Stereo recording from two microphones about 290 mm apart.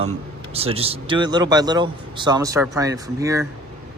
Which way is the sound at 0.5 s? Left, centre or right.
Centre.